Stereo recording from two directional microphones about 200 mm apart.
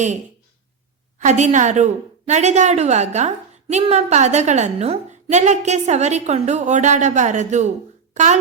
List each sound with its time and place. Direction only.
1.2 s a woman's voice: 35° right (ahead or behind)